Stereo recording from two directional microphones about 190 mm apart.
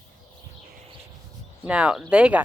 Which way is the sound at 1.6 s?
5° right (ahead or behind).